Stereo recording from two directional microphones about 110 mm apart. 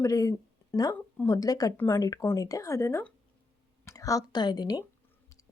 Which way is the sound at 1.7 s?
20° left (ahead or behind).